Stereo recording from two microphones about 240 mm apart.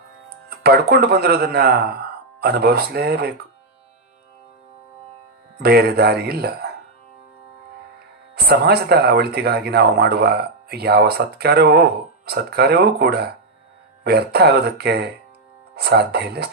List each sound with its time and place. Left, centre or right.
0.4 s speech: right
5.5 s speech: right
8.4 s speech: right